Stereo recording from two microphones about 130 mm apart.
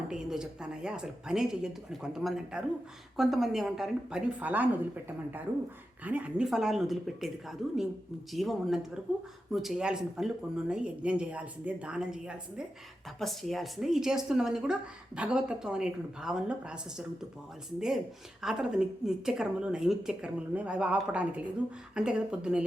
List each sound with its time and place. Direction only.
0.1 s a woman's voice: 5° right (ahead or behind)